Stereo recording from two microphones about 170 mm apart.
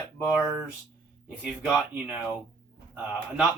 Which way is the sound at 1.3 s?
5° right (ahead or behind).